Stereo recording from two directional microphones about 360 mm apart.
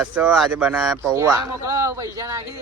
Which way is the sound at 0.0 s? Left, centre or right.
Centre.